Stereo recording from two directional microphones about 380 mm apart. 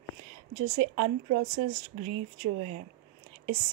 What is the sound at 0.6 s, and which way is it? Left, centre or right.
Speech, right.